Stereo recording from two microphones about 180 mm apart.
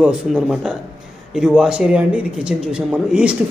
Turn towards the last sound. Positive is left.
turn(degrees=-5)  # may be behind; listen again after turning